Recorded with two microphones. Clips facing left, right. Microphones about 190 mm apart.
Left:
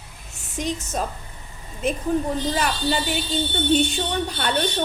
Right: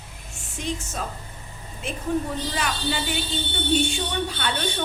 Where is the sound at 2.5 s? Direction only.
40° left (ahead or behind).